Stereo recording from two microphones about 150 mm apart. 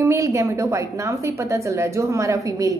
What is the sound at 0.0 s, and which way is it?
A woman's voice, 20° right (ahead or behind).